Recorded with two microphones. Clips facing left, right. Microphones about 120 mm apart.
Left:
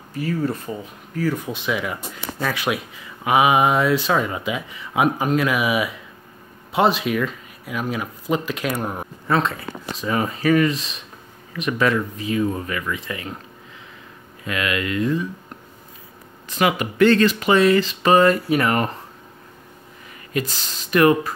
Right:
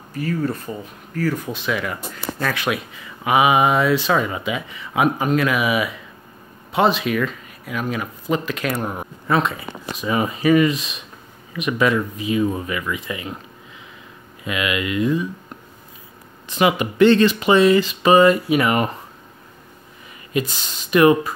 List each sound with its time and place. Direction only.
0.2 s speech: 20° left (ahead or behind)
9.3 s speech: 10° right (ahead or behind)
14.4 s speech: 15° right (ahead or behind)
16.4 s speech: 20° right (ahead or behind)
20.3 s speech: 20° right (ahead or behind)